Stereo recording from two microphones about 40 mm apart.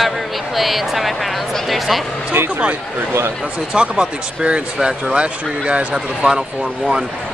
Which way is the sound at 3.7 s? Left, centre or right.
Right.